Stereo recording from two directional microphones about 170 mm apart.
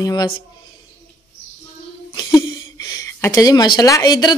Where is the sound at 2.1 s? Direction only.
25° left (ahead or behind).